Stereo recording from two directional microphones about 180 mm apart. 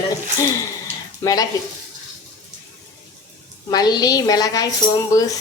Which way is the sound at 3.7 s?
20° left (ahead or behind).